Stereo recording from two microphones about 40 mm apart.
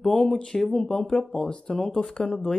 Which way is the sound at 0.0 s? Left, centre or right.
Centre.